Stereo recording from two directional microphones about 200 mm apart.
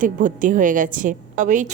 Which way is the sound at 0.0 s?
40° right (ahead or behind).